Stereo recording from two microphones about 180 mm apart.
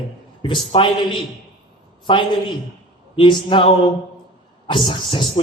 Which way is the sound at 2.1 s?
25° left (ahead or behind).